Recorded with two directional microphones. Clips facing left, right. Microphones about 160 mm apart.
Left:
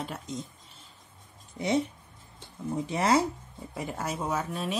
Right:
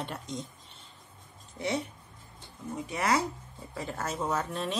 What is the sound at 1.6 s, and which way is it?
Speech, 15° left (ahead or behind).